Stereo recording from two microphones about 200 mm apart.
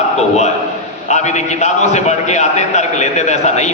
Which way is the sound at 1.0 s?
35° left (ahead or behind).